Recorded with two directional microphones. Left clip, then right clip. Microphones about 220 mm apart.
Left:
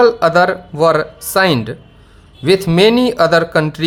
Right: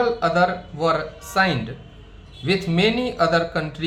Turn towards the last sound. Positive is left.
turn(degrees=50)  # may be behind; listen again after turning